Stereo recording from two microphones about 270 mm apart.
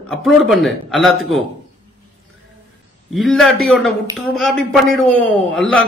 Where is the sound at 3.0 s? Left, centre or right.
Centre.